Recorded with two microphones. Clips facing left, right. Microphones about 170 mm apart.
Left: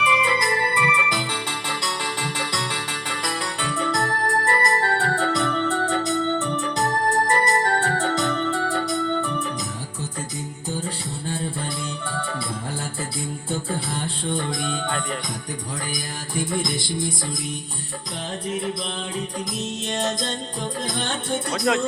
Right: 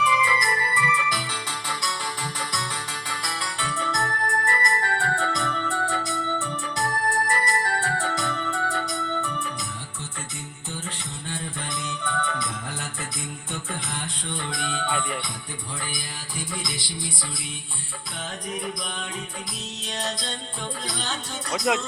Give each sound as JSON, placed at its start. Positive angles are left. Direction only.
{"t": 0.0, "sound": "music", "side_deg": 65}
{"t": 3.8, "sound": "organ", "side_deg": 35}
{"t": 5.4, "sound": "music", "side_deg": 35}
{"t": 5.9, "sound": "organ", "side_deg": 20}
{"t": 6.4, "sound": "organ", "side_deg": 40}
{"t": 11.3, "sound": "music", "side_deg": 35}
{"t": 13.5, "sound": "music", "side_deg": 35}
{"t": 16.3, "sound": "music", "side_deg": 50}
{"t": 18.4, "sound": "music", "side_deg": 25}
{"t": 19.9, "sound": "music", "side_deg": 50}